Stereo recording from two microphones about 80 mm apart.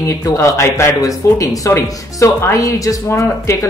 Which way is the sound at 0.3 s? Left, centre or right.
Left.